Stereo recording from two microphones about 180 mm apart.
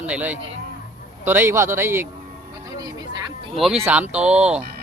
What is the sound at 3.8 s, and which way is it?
Speech, 10° right (ahead or behind).